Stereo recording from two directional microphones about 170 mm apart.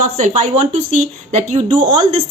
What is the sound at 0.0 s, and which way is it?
Speech, 45° right (ahead or behind).